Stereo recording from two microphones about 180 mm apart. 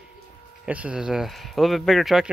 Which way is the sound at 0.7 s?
5° right (ahead or behind).